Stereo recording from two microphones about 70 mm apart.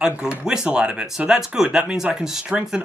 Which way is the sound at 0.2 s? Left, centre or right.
Centre.